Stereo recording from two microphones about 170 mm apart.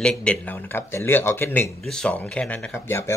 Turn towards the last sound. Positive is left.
turn(degrees=15)  # may be behind; listen again after turning